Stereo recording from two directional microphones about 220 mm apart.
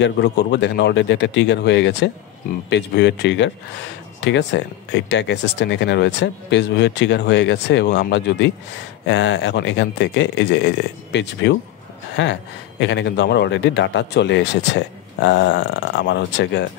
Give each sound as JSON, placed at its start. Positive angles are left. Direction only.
{"t": 0.0, "sound": "speech", "side_deg": 50}
{"t": 12.2, "sound": "a sound", "side_deg": 55}
{"t": 12.8, "sound": "speech", "side_deg": 55}